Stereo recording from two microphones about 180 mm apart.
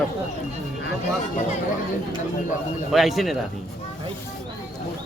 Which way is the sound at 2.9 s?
Centre (ahead or behind).